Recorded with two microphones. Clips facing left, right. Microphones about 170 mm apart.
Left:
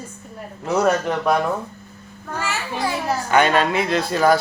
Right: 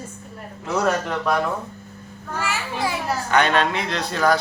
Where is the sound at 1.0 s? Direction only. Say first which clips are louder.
Left 3 dB; 15° left (ahead or behind).